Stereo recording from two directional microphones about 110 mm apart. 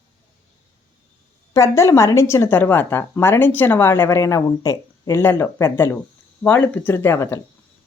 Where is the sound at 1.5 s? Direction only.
30° left (ahead or behind).